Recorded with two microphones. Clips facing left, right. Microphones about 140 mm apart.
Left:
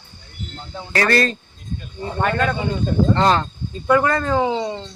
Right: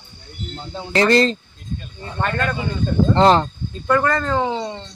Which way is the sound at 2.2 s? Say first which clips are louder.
Left 2 dB; 10° left (ahead or behind).